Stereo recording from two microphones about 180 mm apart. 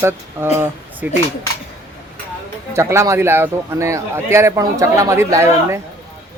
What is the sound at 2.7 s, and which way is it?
A man's voice, 15° right (ahead or behind).